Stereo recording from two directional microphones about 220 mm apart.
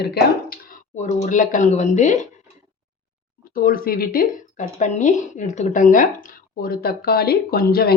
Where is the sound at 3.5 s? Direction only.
40° left (ahead or behind).